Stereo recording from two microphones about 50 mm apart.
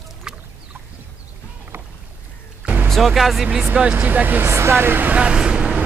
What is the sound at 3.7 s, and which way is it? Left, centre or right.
Speech, right.